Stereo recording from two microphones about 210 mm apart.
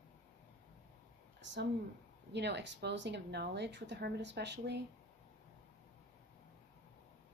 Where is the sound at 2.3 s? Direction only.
55° right (ahead or behind).